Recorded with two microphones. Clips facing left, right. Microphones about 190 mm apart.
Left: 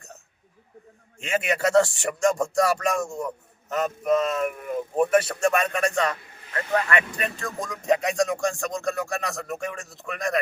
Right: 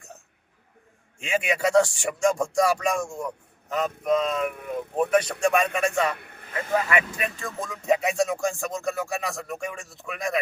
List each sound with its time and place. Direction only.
1.2 s speech: centre (ahead or behind)
6.1 s speech: 60° right (ahead or behind)
6.7 s speech: 5° right (ahead or behind)